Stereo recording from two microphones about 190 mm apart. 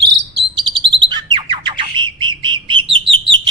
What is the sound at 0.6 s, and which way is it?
Bird, 25° right (ahead or behind).